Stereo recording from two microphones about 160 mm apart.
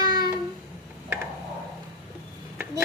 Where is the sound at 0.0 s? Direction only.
25° right (ahead or behind).